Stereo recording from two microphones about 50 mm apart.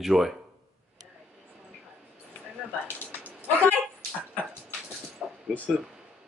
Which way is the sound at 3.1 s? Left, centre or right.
Right.